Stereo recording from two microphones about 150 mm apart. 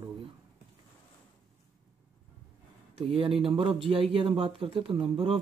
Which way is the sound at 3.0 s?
40° right (ahead or behind).